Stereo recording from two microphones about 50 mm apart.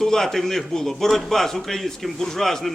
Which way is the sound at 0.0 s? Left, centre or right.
Centre.